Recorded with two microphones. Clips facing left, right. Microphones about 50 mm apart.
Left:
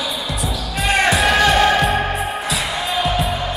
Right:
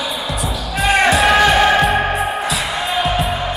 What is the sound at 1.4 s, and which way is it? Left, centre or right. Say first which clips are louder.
Music: right 2 dB; centre.